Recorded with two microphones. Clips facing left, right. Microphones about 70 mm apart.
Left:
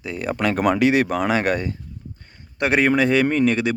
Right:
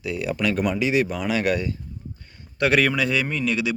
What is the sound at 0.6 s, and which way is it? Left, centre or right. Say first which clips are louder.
Speech: left 7 dB; left.